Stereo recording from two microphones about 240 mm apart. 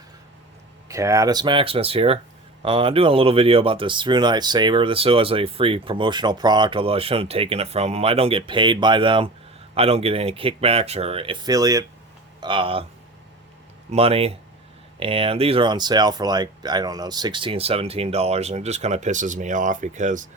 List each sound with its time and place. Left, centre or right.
0.9 s speech: centre
13.9 s speech: right